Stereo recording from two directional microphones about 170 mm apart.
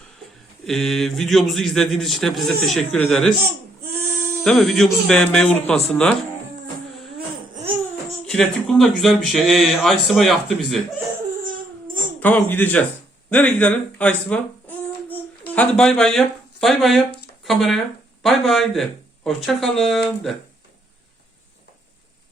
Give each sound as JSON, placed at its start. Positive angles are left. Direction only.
{"t": 0.6, "sound": "a man's voice", "side_deg": 0}
{"t": 4.4, "sound": "a man's voice", "side_deg": 0}
{"t": 7.5, "sound": "laughter", "side_deg": -35}
{"t": 8.3, "sound": "a man's voice", "side_deg": 5}
{"t": 12.2, "sound": "a man's voice", "side_deg": 10}